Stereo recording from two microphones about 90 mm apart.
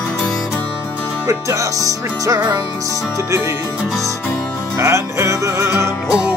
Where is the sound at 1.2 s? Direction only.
35° right (ahead or behind).